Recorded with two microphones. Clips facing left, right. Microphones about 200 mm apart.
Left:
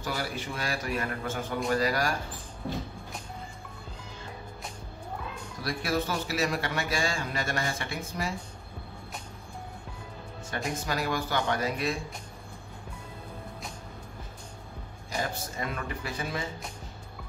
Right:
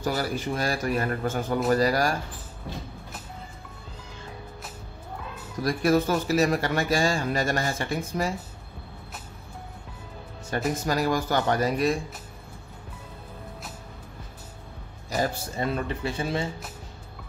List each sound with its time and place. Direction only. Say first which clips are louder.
0.0 s a man's voice: right 6 dB; 40° right (ahead or behind)
5.6 s a man's voice: right 8 dB; 45° right (ahead or behind)
10.5 s a man's voice: right 6 dB; 40° right (ahead or behind)
15.0 s speech: right 6 dB; 35° right (ahead or behind)